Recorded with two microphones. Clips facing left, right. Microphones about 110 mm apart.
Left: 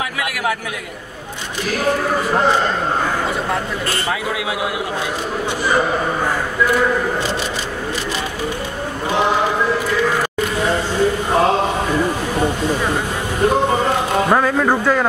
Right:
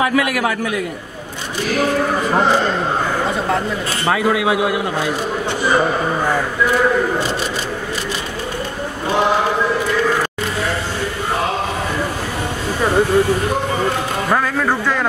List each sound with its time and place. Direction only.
0.0 s a man's voice: 50° right (ahead or behind)
4.1 s a man's voice: 50° right (ahead or behind)
14.3 s speech: 15° left (ahead or behind)